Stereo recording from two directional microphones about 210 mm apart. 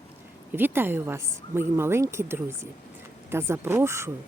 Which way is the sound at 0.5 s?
10° right (ahead or behind).